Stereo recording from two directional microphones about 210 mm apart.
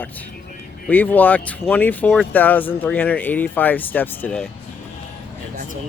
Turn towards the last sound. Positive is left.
turn(degrees=5)  # may be behind; listen again after turning